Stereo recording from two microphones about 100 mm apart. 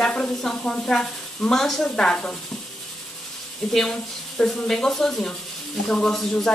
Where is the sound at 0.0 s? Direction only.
5° left (ahead or behind).